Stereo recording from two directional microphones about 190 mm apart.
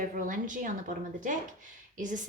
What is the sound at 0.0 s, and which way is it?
Speech, 45° right (ahead or behind).